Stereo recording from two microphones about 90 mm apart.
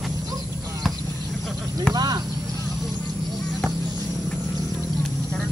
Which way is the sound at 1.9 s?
45° right (ahead or behind).